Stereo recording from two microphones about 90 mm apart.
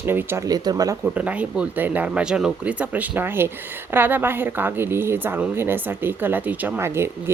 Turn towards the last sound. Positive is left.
turn(degrees=-25)  # may be behind; listen again after turning